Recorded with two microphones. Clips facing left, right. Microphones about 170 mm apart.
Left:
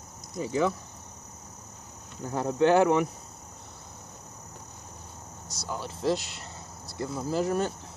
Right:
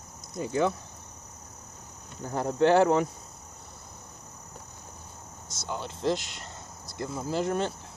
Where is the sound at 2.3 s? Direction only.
10° left (ahead or behind).